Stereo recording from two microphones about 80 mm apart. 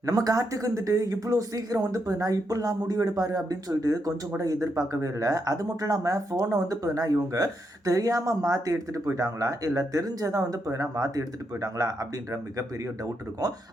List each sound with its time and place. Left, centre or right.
0.0 s speech: right